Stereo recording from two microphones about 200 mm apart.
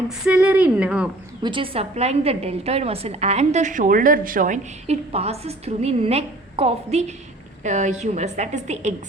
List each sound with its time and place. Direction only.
0.3 s a woman's voice: 5° right (ahead or behind)
1.4 s a woman's voice: 25° right (ahead or behind)